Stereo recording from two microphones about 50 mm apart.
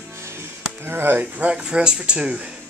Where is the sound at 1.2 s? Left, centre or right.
Right.